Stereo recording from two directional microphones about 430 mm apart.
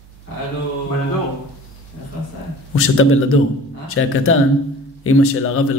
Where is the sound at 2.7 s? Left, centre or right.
Left.